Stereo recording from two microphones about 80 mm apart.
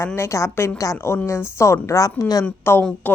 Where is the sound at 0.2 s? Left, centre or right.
Left.